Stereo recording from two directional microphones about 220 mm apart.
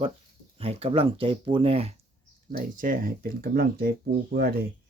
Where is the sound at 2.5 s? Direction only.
40° right (ahead or behind).